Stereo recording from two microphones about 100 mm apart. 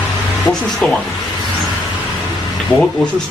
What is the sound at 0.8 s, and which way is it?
Speech, 10° left (ahead or behind).